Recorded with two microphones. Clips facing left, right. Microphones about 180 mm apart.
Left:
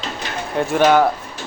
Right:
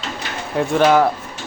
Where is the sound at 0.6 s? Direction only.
Centre (ahead or behind).